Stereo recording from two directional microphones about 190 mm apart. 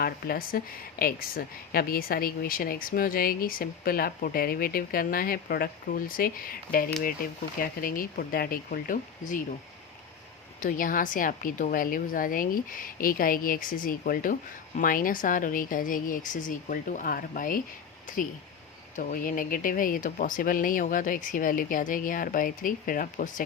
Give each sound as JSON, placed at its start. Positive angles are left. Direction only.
{"t": 0.0, "sound": "speech", "side_deg": 50}
{"t": 10.6, "sound": "speech", "side_deg": 45}
{"t": 18.9, "sound": "speech", "side_deg": 45}